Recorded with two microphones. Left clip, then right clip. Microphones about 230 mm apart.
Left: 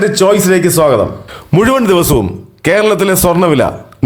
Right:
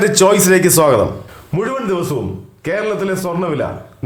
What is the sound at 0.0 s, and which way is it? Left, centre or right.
A man's voice, centre.